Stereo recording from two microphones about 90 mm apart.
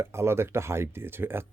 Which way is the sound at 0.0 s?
30° right (ahead or behind).